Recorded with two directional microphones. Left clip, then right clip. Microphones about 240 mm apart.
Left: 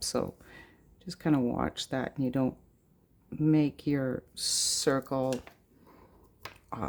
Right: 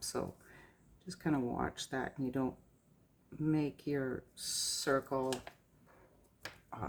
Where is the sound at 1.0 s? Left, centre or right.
Left.